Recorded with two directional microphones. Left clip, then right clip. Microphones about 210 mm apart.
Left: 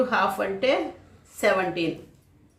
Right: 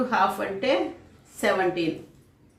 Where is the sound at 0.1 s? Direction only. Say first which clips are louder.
Even; 30° left (ahead or behind).